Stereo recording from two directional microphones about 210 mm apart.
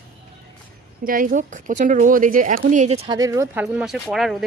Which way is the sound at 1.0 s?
40° right (ahead or behind).